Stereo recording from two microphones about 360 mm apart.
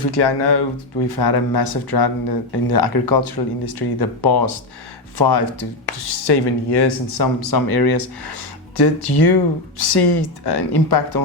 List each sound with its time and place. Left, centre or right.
0.0 s speech: left
6.1 s speech: left
9.7 s speech: left